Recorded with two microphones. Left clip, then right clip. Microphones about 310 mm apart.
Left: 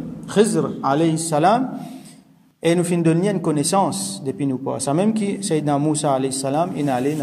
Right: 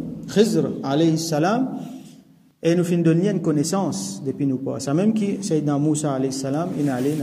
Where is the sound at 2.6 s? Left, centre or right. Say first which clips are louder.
Left 1 dB; centre.